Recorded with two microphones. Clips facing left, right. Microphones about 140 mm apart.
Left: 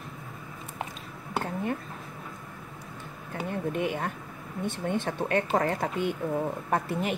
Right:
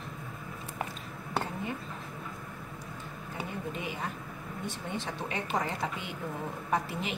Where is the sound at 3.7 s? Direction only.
60° left (ahead or behind).